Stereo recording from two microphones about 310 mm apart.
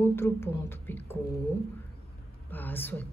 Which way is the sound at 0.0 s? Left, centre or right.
Centre.